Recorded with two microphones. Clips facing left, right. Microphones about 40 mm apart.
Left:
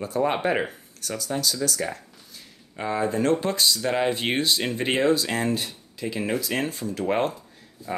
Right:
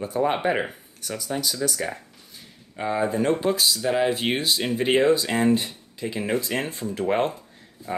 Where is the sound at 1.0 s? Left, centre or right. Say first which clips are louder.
Left 1 dB; centre.